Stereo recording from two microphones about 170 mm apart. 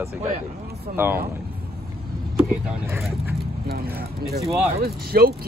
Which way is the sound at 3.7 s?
65° right (ahead or behind).